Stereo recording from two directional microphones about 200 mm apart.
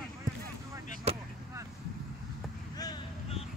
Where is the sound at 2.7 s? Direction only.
20° left (ahead or behind).